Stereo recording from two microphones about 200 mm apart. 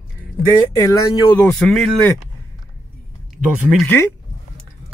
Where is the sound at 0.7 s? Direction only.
15° left (ahead or behind).